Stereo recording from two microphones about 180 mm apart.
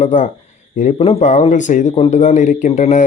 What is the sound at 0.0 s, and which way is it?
Speech, 45° left (ahead or behind).